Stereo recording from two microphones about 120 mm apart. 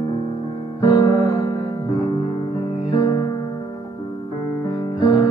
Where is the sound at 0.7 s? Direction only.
30° left (ahead or behind).